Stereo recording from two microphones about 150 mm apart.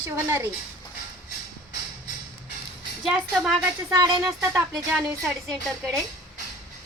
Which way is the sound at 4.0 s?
25° right (ahead or behind).